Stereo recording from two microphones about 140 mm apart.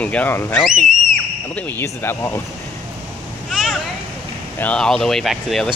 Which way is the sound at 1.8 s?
20° left (ahead or behind).